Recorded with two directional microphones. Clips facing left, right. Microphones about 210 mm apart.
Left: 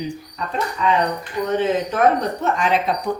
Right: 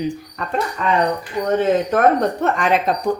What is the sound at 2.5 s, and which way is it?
Speech, 55° right (ahead or behind).